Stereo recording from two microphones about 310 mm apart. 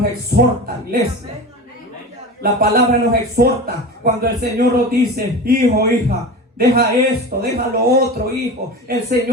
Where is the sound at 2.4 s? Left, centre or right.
Right.